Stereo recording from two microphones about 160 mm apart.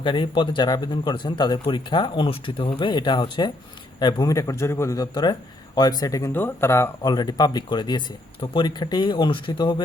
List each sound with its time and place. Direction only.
0.0 s a man's voice: 30° left (ahead or behind)